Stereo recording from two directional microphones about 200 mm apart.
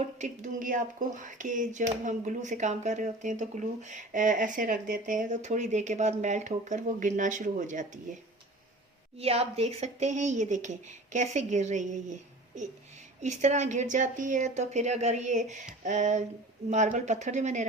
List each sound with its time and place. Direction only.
0.0 s speech: 35° right (ahead or behind)
13.2 s speech: 35° right (ahead or behind)